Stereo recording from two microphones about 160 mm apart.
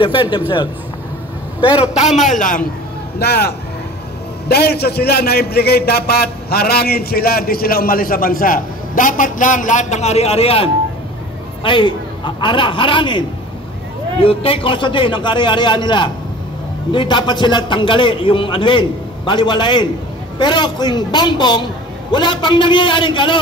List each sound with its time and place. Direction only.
0.0 s a man's voice: 30° left (ahead or behind)
2.3 s a man's voice: 55° left (ahead or behind)
3.2 s a man's voice: 85° left; by 13.2 s 30° left (ahead or behind)
14.2 s a man's voice: 35° left (ahead or behind)